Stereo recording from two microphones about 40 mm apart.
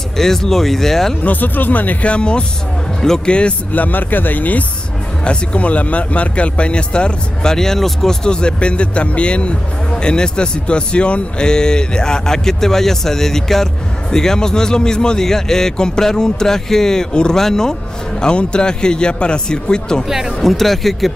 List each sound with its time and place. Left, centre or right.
0.2 s speech: centre
1.2 s speech: left
2.0 s speech: left
3.7 s speech: left
5.2 s a man's voice: left
7.5 s speech: centre
20.1 s speech: centre
20.3 s speech: centre